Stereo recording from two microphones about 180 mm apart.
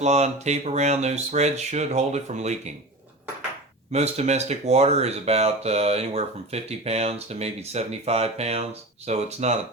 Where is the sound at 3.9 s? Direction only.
35° right (ahead or behind).